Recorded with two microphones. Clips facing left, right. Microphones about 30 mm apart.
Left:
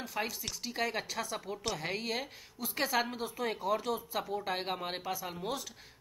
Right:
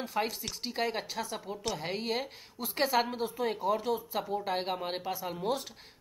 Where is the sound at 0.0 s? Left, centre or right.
Right.